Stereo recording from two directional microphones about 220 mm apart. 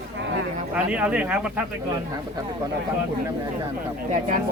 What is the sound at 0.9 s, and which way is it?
Speech, 5° right (ahead or behind).